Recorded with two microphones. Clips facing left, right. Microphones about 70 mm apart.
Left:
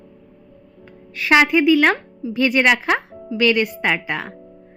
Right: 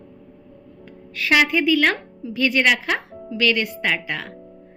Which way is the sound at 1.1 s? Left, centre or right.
Left.